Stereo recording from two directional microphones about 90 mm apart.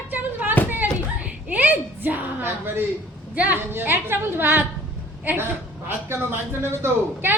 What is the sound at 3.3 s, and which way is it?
A woman's voice, 15° right (ahead or behind).